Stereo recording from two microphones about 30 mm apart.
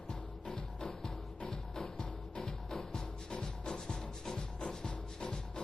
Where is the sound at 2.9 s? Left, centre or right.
Left.